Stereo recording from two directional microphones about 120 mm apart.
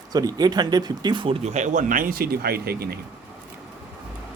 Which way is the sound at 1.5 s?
80° right.